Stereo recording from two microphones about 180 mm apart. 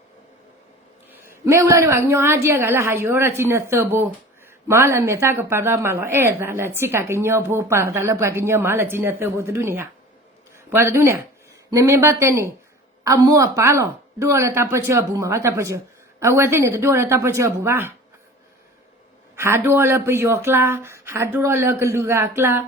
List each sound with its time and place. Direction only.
1.1 s a woman's voice: 15° right (ahead or behind)
19.4 s a woman's voice: 15° right (ahead or behind)